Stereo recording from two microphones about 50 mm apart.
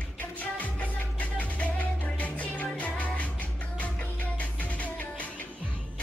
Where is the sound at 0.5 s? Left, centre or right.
Left.